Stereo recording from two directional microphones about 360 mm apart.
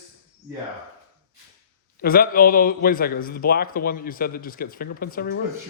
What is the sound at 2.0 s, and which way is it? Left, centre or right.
A man's voice, left.